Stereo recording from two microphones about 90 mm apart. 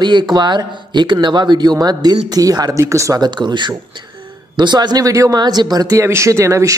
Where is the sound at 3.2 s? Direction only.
60° right (ahead or behind); by 5.3 s 40° right (ahead or behind).